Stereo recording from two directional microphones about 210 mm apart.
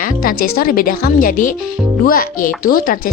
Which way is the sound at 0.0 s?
45° left (ahead or behind).